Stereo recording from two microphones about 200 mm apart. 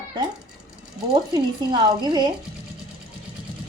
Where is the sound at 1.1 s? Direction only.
20° right (ahead or behind).